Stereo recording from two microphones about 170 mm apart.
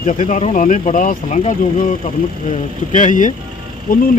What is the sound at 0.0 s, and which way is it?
Speech, 50° left (ahead or behind).